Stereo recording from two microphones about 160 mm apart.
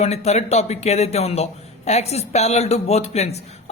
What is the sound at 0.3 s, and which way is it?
A man's voice, 45° left (ahead or behind).